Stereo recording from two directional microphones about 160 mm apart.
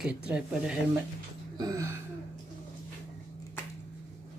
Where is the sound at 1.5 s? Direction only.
20° right (ahead or behind).